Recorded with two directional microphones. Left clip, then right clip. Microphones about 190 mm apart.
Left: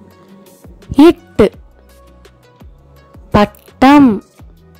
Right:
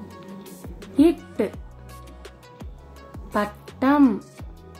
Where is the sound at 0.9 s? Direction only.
50° left (ahead or behind).